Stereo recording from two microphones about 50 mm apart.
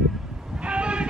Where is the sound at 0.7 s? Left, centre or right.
Right.